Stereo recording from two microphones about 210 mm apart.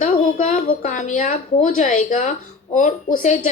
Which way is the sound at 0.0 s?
35° left (ahead or behind).